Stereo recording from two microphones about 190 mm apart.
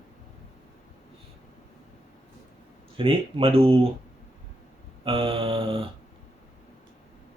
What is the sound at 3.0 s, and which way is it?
Speech, 30° right (ahead or behind).